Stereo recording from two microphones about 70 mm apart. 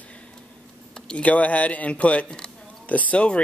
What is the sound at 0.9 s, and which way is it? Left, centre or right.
Speech, centre.